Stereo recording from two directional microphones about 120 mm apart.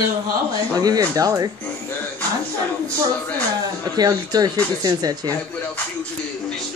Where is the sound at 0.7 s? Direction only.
30° right (ahead or behind).